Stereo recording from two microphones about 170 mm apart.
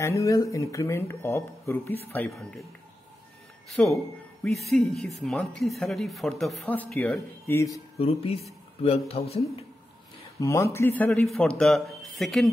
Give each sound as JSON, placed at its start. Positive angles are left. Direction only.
{"t": 0.0, "sound": "speech", "side_deg": 15}
{"t": 3.6, "sound": "speech", "side_deg": 0}
{"t": 8.0, "sound": "speech", "side_deg": 35}
{"t": 10.4, "sound": "speech", "side_deg": 15}